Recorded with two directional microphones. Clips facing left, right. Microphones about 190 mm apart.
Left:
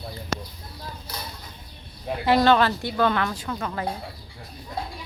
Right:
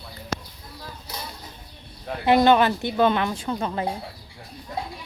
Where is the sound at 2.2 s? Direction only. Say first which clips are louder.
Right 2 dB; 20° right (ahead or behind).